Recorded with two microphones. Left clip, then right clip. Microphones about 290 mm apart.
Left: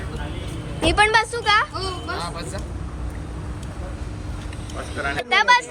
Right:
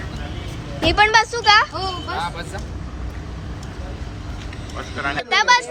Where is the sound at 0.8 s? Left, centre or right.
Centre.